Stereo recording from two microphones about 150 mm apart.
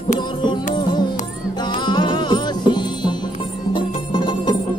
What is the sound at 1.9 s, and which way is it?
Music, 30° left (ahead or behind).